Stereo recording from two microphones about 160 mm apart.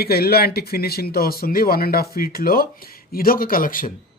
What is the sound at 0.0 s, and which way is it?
Speech, 75° left (ahead or behind).